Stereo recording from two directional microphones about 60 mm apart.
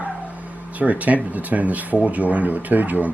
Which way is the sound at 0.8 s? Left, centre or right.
Right.